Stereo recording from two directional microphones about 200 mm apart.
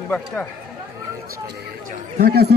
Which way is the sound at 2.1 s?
50° right (ahead or behind).